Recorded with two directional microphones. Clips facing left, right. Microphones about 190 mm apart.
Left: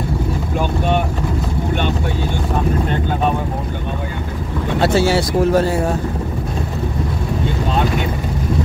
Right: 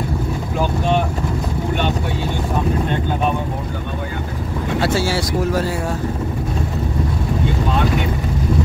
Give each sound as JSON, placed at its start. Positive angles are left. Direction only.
{"t": 4.8, "sound": "speech", "side_deg": 20}